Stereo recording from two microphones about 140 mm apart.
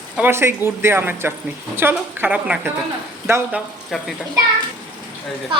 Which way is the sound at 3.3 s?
20° right (ahead or behind).